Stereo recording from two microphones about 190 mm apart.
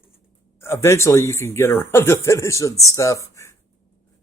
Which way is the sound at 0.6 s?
15° left (ahead or behind).